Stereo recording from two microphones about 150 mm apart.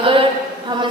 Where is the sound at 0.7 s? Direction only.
30° right (ahead or behind).